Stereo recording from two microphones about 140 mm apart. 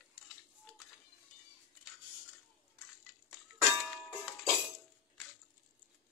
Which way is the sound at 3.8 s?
Centre (ahead or behind).